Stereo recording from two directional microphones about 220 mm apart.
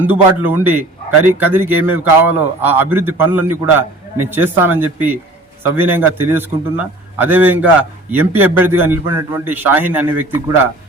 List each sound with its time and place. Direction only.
0.0 s a man's voice: 10° right (ahead or behind)